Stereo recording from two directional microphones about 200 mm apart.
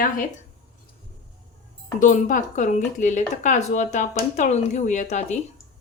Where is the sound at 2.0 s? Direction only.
40° left (ahead or behind).